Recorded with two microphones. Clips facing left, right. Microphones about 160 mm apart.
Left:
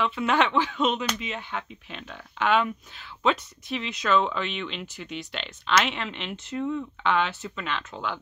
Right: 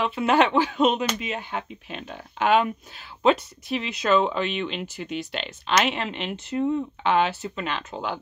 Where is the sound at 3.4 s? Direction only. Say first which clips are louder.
Right 4 dB; 5° right (ahead or behind).